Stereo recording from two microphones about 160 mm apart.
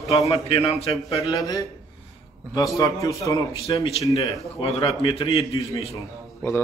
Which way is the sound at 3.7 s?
35° left (ahead or behind).